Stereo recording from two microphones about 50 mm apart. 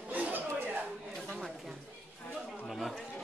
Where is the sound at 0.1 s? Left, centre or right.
Right.